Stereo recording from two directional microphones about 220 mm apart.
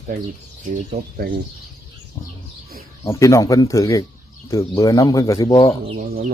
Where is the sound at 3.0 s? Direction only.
15° left (ahead or behind).